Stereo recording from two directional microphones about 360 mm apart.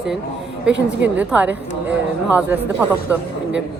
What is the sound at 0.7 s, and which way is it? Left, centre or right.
Speech, right.